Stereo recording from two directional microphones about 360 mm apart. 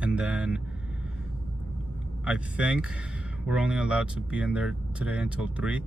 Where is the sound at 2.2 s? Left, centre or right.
Centre.